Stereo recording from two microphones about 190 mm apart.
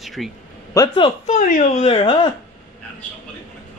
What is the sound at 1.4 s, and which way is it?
Speech, 45° left (ahead or behind).